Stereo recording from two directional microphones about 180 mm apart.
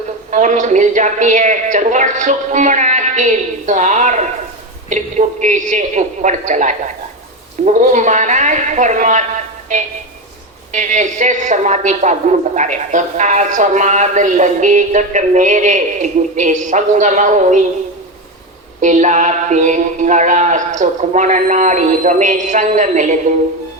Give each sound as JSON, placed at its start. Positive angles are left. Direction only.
{"t": 0.3, "sound": "speech", "side_deg": -45}
{"t": 18.8, "sound": "speech", "side_deg": -45}